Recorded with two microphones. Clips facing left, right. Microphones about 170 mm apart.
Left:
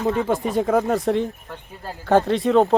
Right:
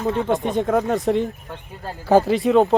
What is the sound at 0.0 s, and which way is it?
Speech, centre (ahead or behind).